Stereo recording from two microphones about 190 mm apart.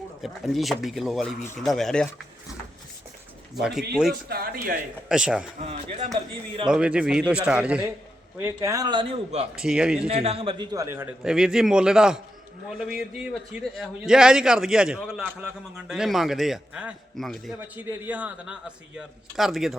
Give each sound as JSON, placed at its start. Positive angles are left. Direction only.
{"t": 0.2, "sound": "a man's voice", "side_deg": 0}
{"t": 3.5, "sound": "a man's voice", "side_deg": 0}
{"t": 4.3, "sound": "a man's voice", "side_deg": -50}
{"t": 5.0, "sound": "a man's voice", "side_deg": -5}
{"t": 5.6, "sound": "speech", "side_deg": -35}
{"t": 6.7, "sound": "a man's voice", "side_deg": -5}
{"t": 9.6, "sound": "a man's voice", "side_deg": -5}
{"t": 10.0, "sound": "a man's voice", "side_deg": -30}